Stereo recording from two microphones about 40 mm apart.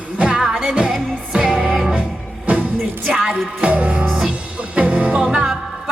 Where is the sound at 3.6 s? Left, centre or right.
Right.